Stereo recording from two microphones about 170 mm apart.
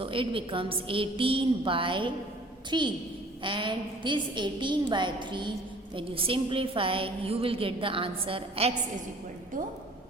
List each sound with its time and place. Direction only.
0.0 s a woman's voice: 30° right (ahead or behind)